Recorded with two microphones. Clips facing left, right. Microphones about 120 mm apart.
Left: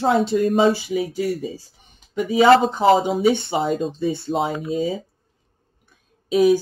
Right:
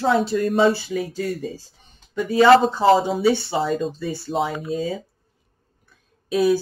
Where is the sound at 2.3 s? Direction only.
5° left (ahead or behind).